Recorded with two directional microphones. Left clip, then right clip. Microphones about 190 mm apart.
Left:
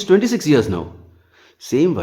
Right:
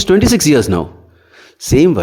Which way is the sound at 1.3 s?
30° right (ahead or behind).